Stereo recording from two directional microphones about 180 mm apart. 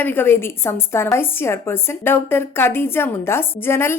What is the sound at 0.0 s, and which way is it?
A woman's voice, 10° left (ahead or behind).